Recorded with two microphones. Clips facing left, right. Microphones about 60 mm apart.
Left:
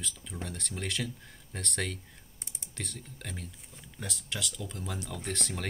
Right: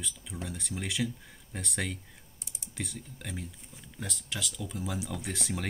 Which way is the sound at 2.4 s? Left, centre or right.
Left.